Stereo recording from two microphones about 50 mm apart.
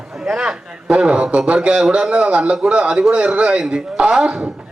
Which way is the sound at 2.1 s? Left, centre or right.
Right.